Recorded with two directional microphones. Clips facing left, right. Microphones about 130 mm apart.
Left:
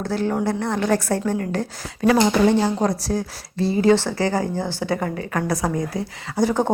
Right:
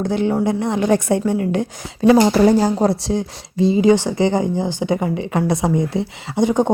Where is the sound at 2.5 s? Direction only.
40° right (ahead or behind).